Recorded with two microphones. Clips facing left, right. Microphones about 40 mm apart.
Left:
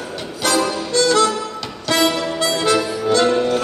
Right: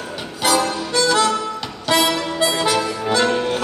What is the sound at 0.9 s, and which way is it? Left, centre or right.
Harmonica, centre.